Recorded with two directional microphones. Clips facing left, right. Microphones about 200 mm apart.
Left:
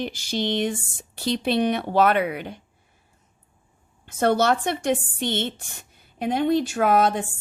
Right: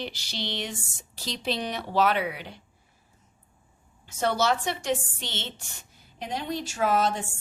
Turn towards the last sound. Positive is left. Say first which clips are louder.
# left 5 dB
turn(degrees=55)  # may be behind; listen again after turning